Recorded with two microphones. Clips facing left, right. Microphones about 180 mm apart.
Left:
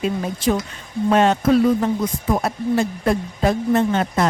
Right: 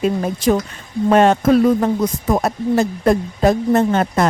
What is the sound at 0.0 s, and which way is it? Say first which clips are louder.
Speech: right 4 dB; 45° right (ahead or behind).